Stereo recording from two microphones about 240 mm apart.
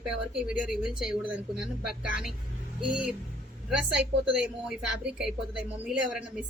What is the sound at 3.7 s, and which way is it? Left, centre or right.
A woman's voice, centre.